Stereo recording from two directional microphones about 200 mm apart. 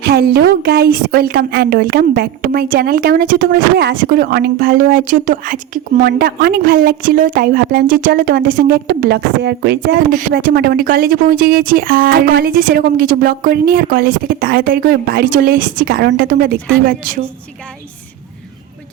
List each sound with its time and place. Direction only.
0.0 s a woman's voice: 55° right (ahead or behind)